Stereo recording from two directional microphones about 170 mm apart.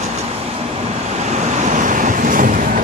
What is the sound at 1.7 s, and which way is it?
Waves, 50° right (ahead or behind).